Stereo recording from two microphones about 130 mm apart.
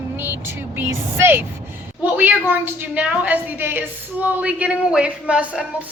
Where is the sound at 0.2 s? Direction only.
15° right (ahead or behind).